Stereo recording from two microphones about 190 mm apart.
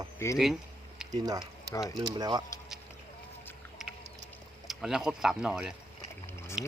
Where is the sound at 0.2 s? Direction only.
15° left (ahead or behind).